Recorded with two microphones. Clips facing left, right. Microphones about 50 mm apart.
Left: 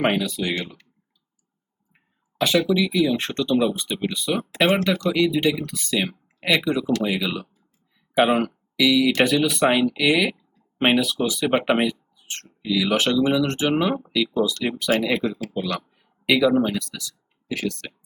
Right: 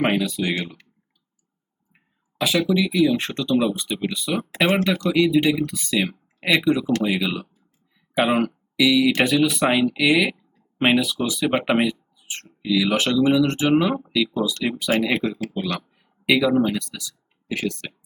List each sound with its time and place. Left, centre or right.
0.0 s speech: centre
2.4 s speech: centre
15.9 s a sound: centre
16.8 s speech: centre